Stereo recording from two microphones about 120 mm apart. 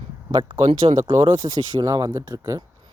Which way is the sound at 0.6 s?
60° right (ahead or behind).